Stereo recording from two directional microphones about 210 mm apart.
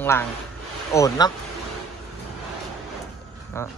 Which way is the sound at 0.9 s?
15° left (ahead or behind).